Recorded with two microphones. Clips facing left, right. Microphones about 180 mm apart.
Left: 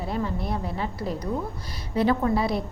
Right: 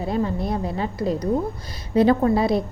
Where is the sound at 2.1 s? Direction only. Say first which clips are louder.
Right 5 dB; 45° right (ahead or behind).